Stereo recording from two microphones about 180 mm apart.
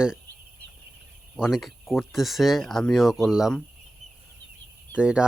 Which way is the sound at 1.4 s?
Centre (ahead or behind).